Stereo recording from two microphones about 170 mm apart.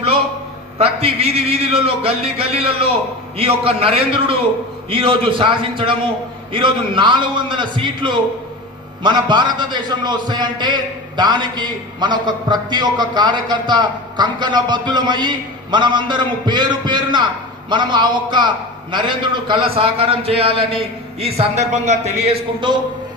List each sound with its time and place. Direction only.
0.8 s a man's voice: 35° right (ahead or behind)